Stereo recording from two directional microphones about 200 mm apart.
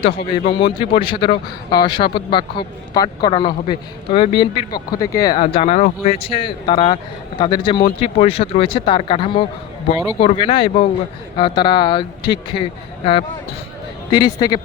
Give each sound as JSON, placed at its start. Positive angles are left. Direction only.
{"t": 0.0, "sound": "a man's voice", "side_deg": 30}
{"t": 14.1, "sound": "a man's voice", "side_deg": 20}